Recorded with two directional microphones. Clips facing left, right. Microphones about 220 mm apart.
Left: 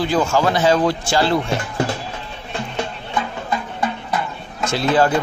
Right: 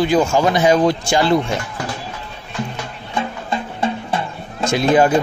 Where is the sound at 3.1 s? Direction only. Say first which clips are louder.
Right 2 dB; 25° right (ahead or behind).